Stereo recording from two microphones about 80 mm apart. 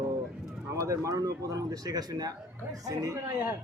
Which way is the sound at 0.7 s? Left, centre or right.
Right.